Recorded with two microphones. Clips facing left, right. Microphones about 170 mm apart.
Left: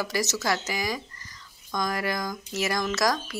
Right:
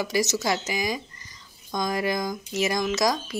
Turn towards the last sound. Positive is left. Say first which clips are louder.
# right 2 dB
turn(degrees=-15)  # may be behind; listen again after turning